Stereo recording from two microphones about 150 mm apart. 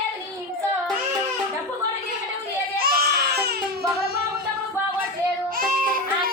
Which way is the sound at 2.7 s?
90° right.